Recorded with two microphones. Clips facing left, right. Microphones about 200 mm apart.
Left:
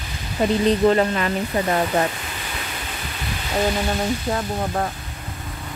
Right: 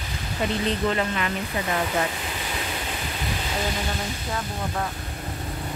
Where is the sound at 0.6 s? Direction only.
40° left (ahead or behind).